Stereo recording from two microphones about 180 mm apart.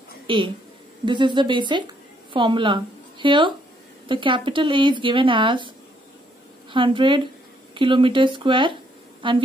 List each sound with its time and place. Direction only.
0.3 s speech: 30° right (ahead or behind)
6.7 s speech: 25° right (ahead or behind)